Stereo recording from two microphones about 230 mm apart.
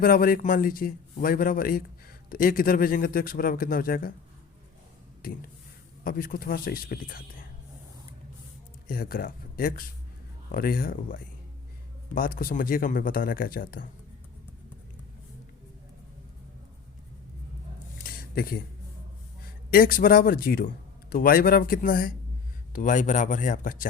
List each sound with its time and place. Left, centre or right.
0.0 s a man's voice: left
6.1 s a man's voice: left
8.9 s a man's voice: left
18.0 s a sound: left
19.7 s a man's voice: left